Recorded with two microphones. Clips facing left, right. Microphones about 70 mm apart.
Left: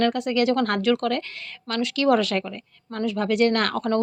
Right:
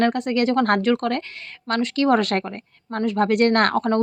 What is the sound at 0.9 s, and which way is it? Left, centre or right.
Speech, right.